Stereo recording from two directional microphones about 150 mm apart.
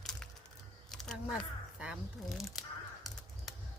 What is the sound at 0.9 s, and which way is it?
Speech, centre (ahead or behind).